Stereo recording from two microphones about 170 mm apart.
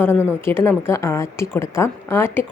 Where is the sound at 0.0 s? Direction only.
10° left (ahead or behind).